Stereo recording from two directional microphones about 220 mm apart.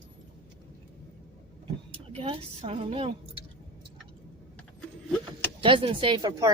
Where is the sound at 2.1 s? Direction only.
25° right (ahead or behind).